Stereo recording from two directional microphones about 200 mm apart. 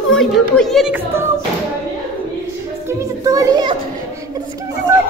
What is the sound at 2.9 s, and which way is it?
Children playing, 15° right (ahead or behind).